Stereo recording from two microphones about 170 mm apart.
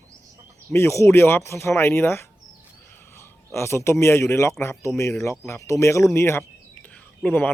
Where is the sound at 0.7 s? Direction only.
15° left (ahead or behind).